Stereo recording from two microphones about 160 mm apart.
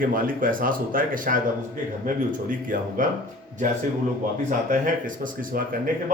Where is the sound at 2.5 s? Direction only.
55° right (ahead or behind).